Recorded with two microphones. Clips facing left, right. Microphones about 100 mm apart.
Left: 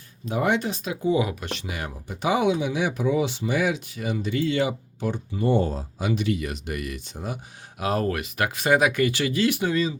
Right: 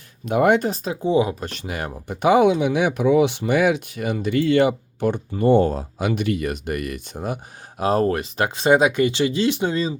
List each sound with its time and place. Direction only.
0.3 s speech: 55° right (ahead or behind)
1.0 s speech: 30° right (ahead or behind); by 7.3 s 50° right (ahead or behind)
7.8 s speech: 35° right (ahead or behind)